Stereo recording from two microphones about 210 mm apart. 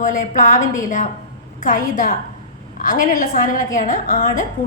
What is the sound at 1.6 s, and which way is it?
A woman's voice, 40° left (ahead or behind).